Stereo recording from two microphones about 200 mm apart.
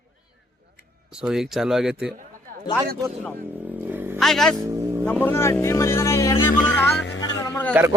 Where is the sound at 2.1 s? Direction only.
45° right (ahead or behind).